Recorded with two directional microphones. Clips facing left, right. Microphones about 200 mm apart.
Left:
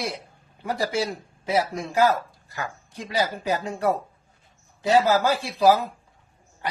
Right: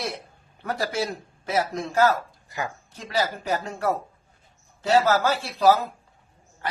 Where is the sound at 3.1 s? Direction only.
15° left (ahead or behind).